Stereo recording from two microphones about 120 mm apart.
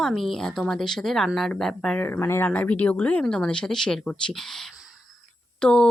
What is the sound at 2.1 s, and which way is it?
Speech, 20° left (ahead or behind).